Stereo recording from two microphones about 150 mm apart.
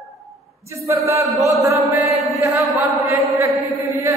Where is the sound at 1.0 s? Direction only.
20° right (ahead or behind).